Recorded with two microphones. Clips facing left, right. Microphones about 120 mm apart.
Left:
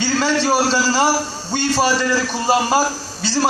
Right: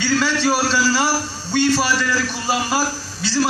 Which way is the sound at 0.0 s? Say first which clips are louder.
Left 1 dB; 45° left (ahead or behind).